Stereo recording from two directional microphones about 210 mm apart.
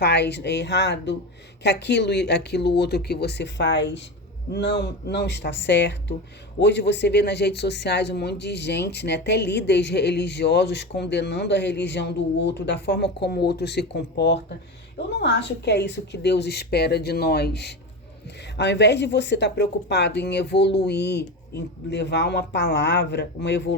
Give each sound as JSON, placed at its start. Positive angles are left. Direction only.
{"t": 0.0, "sound": "speech", "side_deg": 55}